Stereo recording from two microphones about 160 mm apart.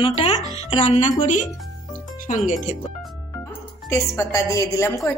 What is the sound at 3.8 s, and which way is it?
A woman's voice, 15° left (ahead or behind).